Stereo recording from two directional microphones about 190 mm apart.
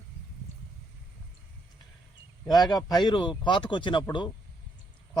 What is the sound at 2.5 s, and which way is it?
Speech, 20° left (ahead or behind).